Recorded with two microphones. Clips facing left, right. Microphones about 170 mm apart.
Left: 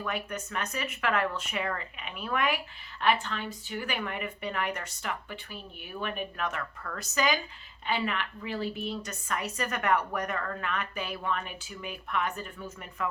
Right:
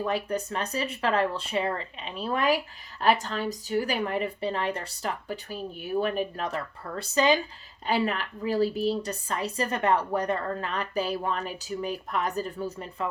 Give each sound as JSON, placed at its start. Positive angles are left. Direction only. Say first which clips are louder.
{"t": 0.0, "sound": "a woman's voice", "louder": "right 6 dB", "side_deg": -30}